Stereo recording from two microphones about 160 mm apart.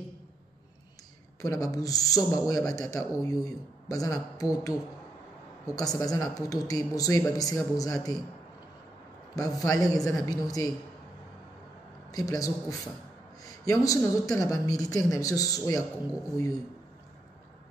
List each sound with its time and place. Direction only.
1.4 s a man's voice: 20° left (ahead or behind)
9.3 s a man's voice: 20° left (ahead or behind)
12.1 s a man's voice: 20° left (ahead or behind)